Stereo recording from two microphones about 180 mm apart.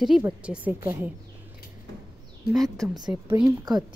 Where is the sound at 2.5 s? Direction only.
Centre (ahead or behind).